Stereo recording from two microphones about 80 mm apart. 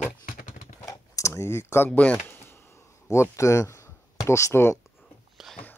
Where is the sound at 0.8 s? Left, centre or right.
Left.